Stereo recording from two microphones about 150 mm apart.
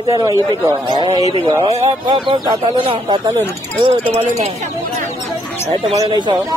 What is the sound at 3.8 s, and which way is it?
Speech, 40° right (ahead or behind).